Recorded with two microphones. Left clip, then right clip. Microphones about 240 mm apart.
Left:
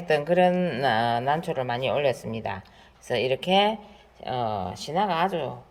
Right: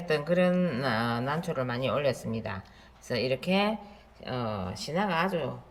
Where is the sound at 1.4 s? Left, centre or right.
Left.